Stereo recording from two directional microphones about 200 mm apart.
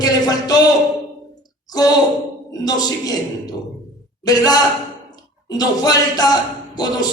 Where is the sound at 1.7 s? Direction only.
20° left (ahead or behind).